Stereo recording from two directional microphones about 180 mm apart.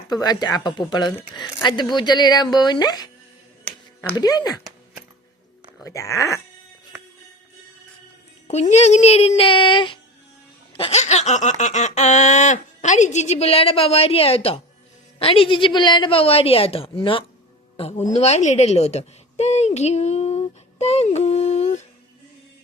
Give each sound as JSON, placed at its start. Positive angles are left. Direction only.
{"t": 0.1, "sound": "speech", "side_deg": 20}
{"t": 4.1, "sound": "speech", "side_deg": 20}
{"t": 5.8, "sound": "speech", "side_deg": 15}
{"t": 8.4, "sound": "a sound", "side_deg": 40}
{"t": 17.7, "sound": "a woman's voice", "side_deg": 35}